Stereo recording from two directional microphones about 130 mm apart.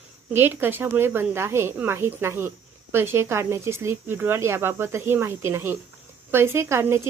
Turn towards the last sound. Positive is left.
turn(degrees=-20)  # may be behind; listen again after turning